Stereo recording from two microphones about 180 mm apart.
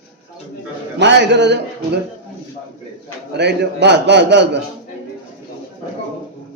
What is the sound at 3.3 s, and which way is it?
A man's voice, 70° right (ahead or behind).